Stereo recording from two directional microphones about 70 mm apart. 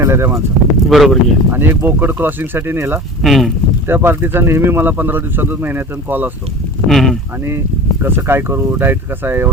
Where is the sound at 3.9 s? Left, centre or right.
Right.